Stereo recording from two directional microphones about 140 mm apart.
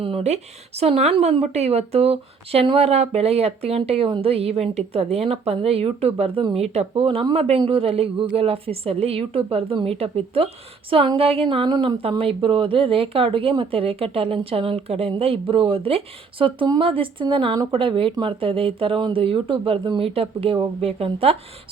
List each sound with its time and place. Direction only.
0.0 s a woman's voice: 45° right (ahead or behind)
12.0 s speech: 40° right (ahead or behind)